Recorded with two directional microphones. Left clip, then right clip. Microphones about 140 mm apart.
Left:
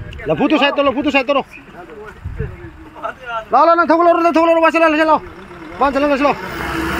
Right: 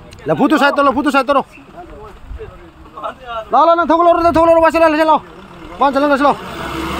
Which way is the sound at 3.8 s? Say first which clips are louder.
Right 1 dB; 10° right (ahead or behind).